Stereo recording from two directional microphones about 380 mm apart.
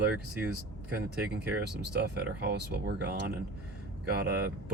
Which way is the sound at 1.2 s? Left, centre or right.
Right.